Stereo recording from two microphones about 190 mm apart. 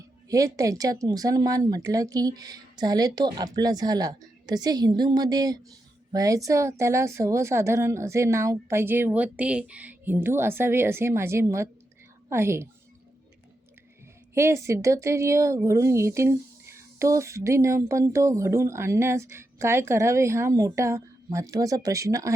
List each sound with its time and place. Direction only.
0.3 s speech: 15° right (ahead or behind)
14.3 s speech: 15° right (ahead or behind)